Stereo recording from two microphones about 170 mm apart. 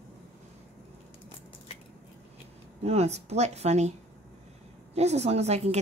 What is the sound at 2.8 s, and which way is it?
Speech, 40° right (ahead or behind).